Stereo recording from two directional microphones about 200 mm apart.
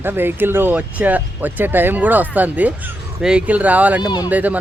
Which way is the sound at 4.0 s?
20° left (ahead or behind).